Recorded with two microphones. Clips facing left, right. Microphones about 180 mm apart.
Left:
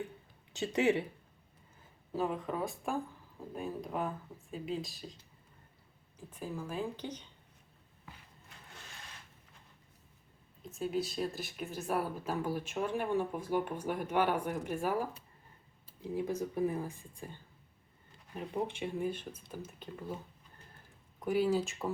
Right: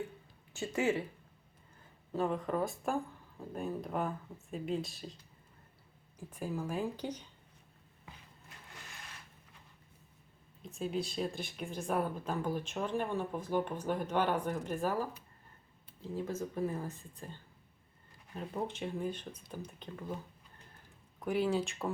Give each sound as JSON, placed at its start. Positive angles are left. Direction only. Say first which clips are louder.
{"t": 0.5, "sound": "speech", "louder": "left 3 dB", "side_deg": 20}
{"t": 2.1, "sound": "speech", "louder": "right 2 dB", "side_deg": 5}
{"t": 6.1, "sound": "speech", "louder": "right 3 dB", "side_deg": -10}
{"t": 10.6, "sound": "speech", "louder": "left 1 dB", "side_deg": 0}
{"t": 16.0, "sound": "speech", "louder": "left 3 dB", "side_deg": 15}
{"t": 18.3, "sound": "speech", "louder": "left 2 dB", "side_deg": 15}
{"t": 21.2, "sound": "speech", "louder": "left 2 dB", "side_deg": 5}